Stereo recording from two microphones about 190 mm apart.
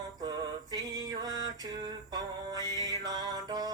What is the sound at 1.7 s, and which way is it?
Mantra, 20° right (ahead or behind).